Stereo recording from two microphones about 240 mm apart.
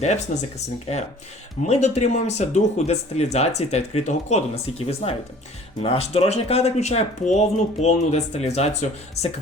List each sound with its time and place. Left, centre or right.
0.3 s speech: left
1.6 s speech: left